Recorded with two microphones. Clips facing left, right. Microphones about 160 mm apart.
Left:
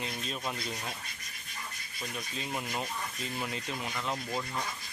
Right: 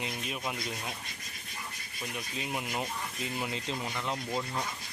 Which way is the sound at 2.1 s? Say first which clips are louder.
Right 1 dB; 15° right (ahead or behind).